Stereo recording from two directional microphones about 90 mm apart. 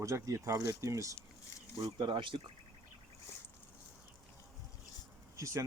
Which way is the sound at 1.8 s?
65° right (ahead or behind).